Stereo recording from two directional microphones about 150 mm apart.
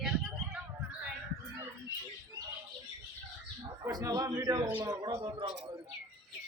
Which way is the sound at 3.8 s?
25° right (ahead or behind).